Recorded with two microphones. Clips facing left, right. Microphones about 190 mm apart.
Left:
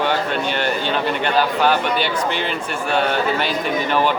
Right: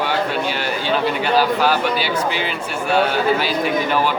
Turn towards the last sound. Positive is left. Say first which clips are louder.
# even
turn(degrees=-5)  # may be behind; listen again after turning